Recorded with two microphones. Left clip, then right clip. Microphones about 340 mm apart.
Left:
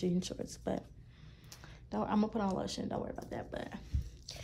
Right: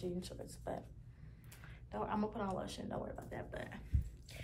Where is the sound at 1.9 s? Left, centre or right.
Centre.